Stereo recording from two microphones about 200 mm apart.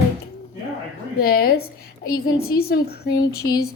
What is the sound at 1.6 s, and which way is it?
Speech, 90° left.